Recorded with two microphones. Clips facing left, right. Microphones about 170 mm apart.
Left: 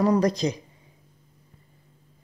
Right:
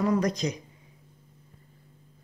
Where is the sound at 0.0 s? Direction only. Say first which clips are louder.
Left 4 dB; 35° left (ahead or behind).